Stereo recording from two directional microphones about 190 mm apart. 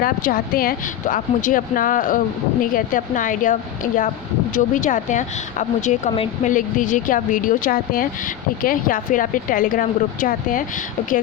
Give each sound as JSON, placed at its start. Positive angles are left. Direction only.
{"t": 0.0, "sound": "speech", "side_deg": 50}